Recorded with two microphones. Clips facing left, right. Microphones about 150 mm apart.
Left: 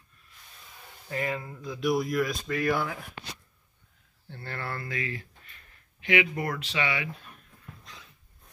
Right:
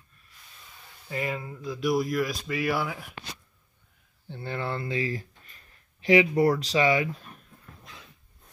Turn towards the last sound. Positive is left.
turn(degrees=-40)  # may be behind; listen again after turning